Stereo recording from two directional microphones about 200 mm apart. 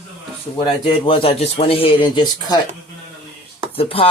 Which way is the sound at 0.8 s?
25° left (ahead or behind).